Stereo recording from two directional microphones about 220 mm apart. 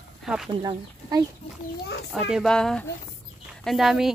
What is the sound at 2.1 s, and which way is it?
Speech, centre (ahead or behind).